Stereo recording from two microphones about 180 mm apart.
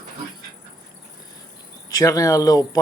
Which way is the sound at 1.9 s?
20° left (ahead or behind).